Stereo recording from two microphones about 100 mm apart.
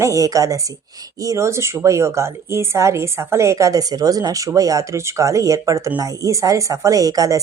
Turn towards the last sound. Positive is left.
turn(degrees=-35)  # may be behind; listen again after turning